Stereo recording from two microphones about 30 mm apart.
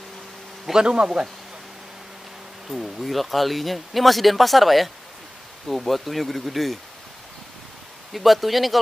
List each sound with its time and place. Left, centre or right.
0.7 s speech: right
2.7 s speech: centre
8.1 s speech: centre